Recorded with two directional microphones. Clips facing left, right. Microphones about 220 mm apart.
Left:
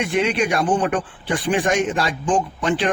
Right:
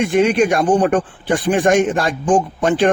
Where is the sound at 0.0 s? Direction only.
45° right (ahead or behind).